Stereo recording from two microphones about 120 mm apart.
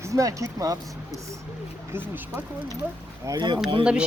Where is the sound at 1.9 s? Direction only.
20° right (ahead or behind).